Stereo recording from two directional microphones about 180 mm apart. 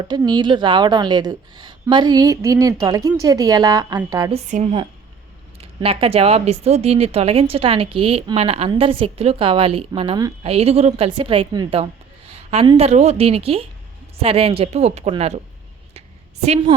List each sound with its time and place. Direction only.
0.2 s a woman's voice: 25° right (ahead or behind)
4.3 s a woman's voice: 35° right (ahead or behind)